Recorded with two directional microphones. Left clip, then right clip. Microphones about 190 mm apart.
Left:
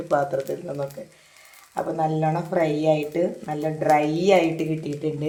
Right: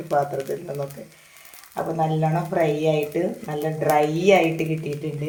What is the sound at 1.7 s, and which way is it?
Speech, 30° left (ahead or behind).